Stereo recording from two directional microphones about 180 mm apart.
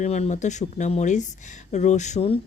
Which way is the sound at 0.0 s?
40° left (ahead or behind).